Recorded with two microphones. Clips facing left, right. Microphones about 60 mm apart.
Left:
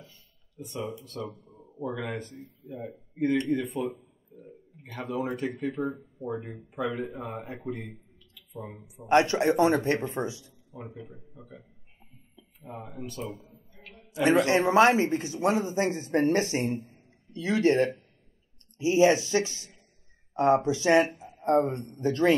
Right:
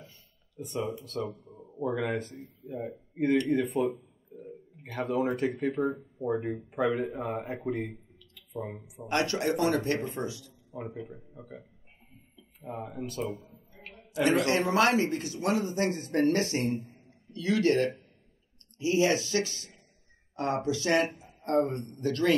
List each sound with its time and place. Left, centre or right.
0.6 s speech: right
1.1 s speech: centre
1.8 s speech: right
3.7 s a sound: centre
4.8 s speech: right
5.8 s speech: centre
6.2 s speech: right
9.1 s speech: left
11.0 s speech: centre
12.6 s speech: centre
14.2 s speech: left